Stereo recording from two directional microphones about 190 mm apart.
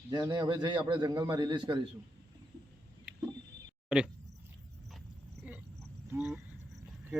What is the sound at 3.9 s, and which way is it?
Speech, 5° right (ahead or behind).